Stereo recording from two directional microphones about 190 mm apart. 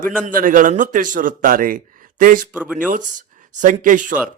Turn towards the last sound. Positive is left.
turn(degrees=-45)  # may be behind; listen again after turning